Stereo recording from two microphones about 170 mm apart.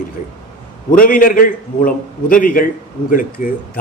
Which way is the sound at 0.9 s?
55° left (ahead or behind).